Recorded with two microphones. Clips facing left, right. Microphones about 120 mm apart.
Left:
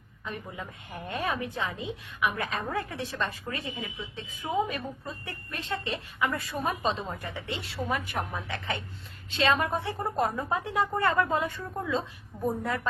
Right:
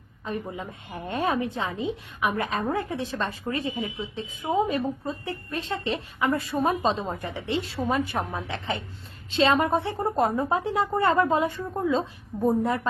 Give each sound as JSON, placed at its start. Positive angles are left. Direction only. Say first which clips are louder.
{"t": 0.3, "sound": "a woman's voice", "louder": "right 6 dB", "side_deg": -20}